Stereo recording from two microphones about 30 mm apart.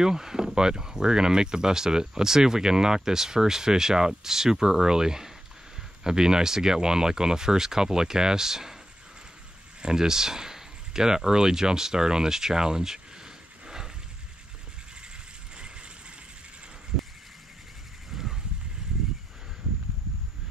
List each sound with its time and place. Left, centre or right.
0.0 s speech: centre
9.8 s speech: right
18.1 s a sound: centre